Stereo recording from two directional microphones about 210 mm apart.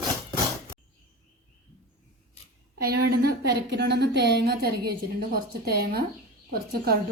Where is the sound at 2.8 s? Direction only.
45° right (ahead or behind).